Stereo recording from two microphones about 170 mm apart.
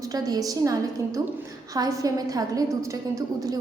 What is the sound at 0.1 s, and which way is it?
A woman's voice, 20° right (ahead or behind).